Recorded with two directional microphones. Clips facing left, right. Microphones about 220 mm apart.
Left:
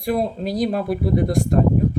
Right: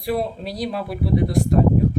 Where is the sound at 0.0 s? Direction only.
45° left (ahead or behind).